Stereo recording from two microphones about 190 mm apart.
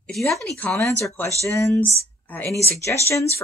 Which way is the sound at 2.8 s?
15° left (ahead or behind).